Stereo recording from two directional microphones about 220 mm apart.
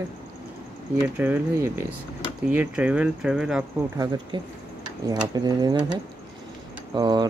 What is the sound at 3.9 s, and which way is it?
Speech, 15° right (ahead or behind).